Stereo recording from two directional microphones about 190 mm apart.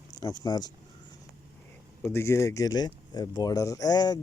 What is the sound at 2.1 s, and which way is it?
Speech, 15° left (ahead or behind).